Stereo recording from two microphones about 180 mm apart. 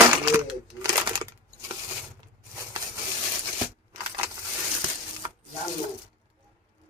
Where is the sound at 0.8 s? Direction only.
25° right (ahead or behind).